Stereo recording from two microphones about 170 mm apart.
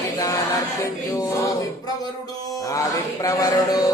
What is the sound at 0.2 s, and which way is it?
Music, 20° left (ahead or behind).